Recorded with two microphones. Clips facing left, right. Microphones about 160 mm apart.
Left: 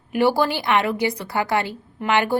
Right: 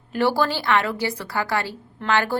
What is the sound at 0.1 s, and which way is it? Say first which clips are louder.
A woman's voice: left 2 dB; 15° left (ahead or behind).